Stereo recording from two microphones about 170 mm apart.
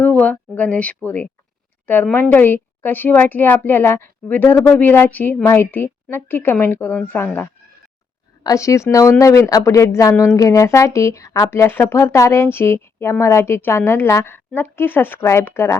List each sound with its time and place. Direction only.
0.0 s speech: 10° left (ahead or behind)
8.4 s speech: 20° left (ahead or behind)